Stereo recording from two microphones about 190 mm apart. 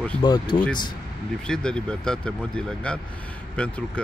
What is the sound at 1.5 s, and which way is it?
Speech, 5° left (ahead or behind).